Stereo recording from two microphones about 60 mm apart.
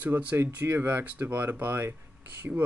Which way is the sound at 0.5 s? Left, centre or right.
Right.